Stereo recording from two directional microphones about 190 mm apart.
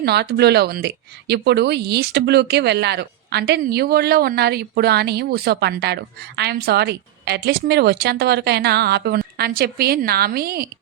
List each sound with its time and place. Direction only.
0.0 s speech: 60° right (ahead or behind)